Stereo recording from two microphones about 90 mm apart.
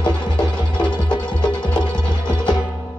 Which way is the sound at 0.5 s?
55° left (ahead or behind).